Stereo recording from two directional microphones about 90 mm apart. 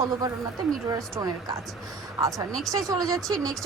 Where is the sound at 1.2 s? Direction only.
40° right (ahead or behind).